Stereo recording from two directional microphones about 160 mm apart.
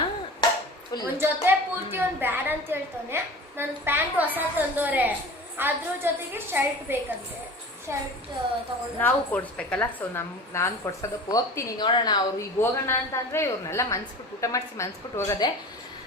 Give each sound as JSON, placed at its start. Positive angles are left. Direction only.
{"t": 1.2, "sound": "a woman's voice", "side_deg": -15}
{"t": 9.0, "sound": "a woman's voice", "side_deg": 10}
{"t": 12.5, "sound": "a woman's voice", "side_deg": 15}